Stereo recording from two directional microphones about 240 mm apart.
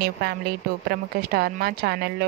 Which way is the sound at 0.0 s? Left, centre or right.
Right.